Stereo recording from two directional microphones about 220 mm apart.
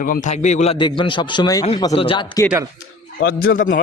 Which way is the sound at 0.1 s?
30° left (ahead or behind).